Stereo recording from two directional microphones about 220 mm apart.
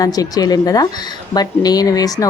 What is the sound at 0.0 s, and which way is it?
Speech, 15° left (ahead or behind).